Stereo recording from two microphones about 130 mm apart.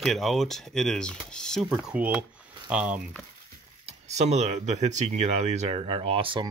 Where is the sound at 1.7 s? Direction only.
10° right (ahead or behind).